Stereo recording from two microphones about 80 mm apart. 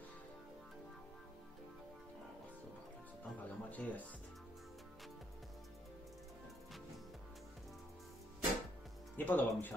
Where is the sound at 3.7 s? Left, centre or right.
Centre.